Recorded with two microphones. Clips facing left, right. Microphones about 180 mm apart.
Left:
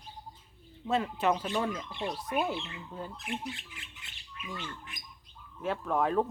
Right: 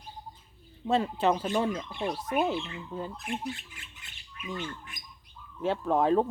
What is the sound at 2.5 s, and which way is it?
Speech, 50° right (ahead or behind).